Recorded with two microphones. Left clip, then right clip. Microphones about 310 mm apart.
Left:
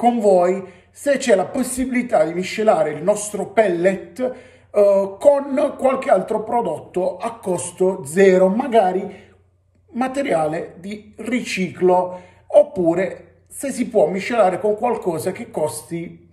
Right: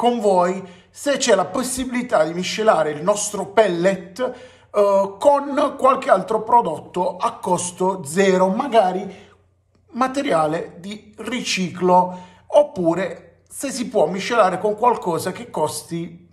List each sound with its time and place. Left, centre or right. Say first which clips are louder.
0.0 s speech: left 2 dB; centre